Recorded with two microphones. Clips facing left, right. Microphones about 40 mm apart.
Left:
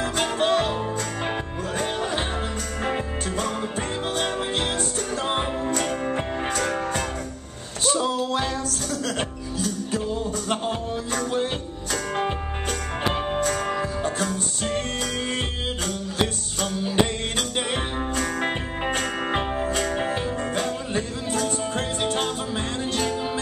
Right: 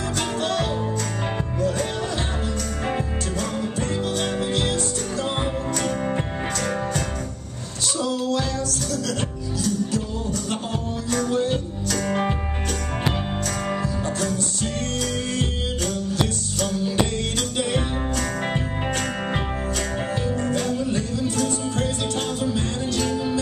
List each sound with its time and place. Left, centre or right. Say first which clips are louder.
0.2 s music: left 3 dB; left
4.2 s music: even; left
8.0 s music: even; left
9.6 s music: right 3 dB; left
11.1 s music: right 4 dB; left
14.2 s music: right 1 dB; left
16.8 s music: left 3 dB; left